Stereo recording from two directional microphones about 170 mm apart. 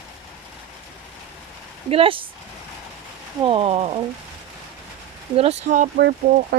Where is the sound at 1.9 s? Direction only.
30° right (ahead or behind).